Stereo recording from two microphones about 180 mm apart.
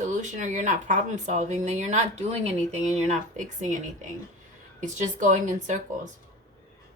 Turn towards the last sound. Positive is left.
turn(degrees=-45)  # may be behind; listen again after turning